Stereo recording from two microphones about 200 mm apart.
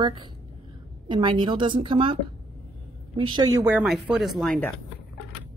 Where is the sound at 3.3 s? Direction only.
20° right (ahead or behind).